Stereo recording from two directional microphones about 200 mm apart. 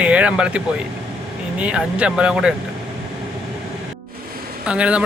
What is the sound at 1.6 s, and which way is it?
Speech, 5° right (ahead or behind).